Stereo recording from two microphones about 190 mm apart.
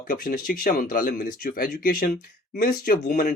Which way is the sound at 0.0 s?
50° left (ahead or behind).